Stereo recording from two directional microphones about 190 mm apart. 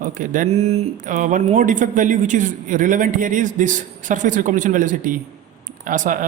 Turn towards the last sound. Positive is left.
turn(degrees=-45)  # may be behind; listen again after turning